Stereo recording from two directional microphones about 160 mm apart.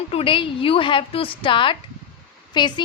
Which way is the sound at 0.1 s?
35° left (ahead or behind).